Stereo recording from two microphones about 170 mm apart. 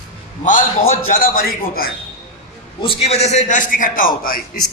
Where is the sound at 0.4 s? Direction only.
50° left (ahead or behind).